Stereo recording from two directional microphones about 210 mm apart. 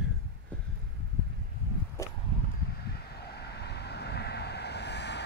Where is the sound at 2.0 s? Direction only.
15° left (ahead or behind).